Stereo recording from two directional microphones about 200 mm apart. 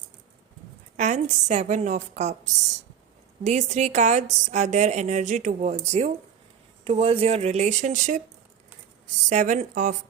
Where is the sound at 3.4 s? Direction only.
35° right (ahead or behind).